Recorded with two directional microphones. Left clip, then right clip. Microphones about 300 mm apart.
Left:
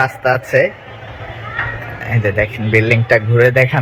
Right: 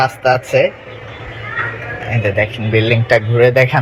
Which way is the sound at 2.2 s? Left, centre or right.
Centre.